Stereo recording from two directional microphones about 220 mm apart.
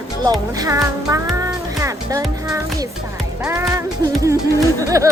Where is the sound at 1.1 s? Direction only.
5° right (ahead or behind).